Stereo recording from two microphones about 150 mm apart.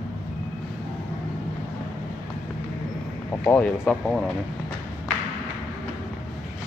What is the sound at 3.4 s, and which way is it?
Speech, 10° left (ahead or behind).